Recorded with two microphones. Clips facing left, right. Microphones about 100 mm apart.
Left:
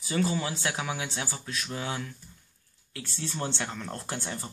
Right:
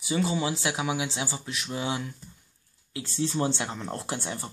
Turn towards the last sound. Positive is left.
turn(degrees=-20)  # may be behind; listen again after turning